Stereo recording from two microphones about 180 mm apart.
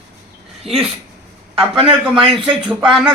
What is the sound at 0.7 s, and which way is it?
Speech, centre (ahead or behind).